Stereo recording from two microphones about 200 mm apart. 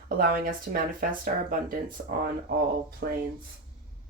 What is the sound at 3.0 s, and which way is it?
Speech, 55° right (ahead or behind).